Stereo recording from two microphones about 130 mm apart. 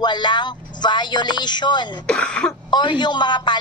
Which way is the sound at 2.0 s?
5° left (ahead or behind).